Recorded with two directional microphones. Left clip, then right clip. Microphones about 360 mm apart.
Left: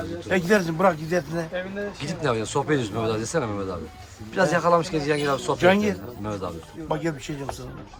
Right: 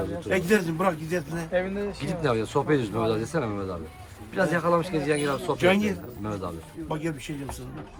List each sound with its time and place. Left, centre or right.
0.3 s speech: centre